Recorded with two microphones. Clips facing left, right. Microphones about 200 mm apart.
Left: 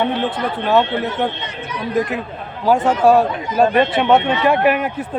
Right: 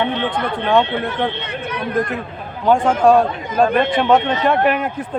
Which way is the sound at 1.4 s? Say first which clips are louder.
Right 2 dB; 60° right (ahead or behind).